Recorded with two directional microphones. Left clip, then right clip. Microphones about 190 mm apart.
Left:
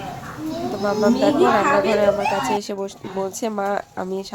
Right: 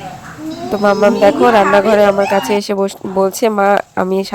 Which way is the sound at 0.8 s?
35° right (ahead or behind).